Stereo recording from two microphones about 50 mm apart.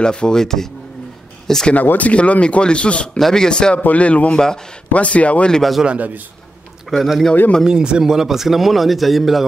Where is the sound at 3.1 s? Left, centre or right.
Centre.